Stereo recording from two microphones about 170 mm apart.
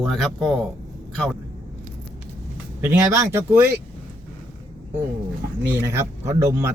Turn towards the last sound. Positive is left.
turn(degrees=-15)  # may be behind; listen again after turning